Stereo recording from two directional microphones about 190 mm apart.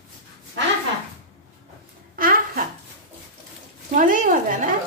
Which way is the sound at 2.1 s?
50° right (ahead or behind).